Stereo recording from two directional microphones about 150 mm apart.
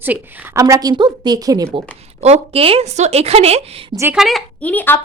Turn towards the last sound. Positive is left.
turn(degrees=10)  # may be behind; listen again after turning